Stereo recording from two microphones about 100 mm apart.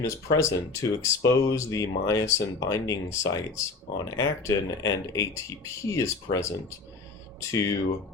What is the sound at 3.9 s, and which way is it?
Speech, 35° left (ahead or behind).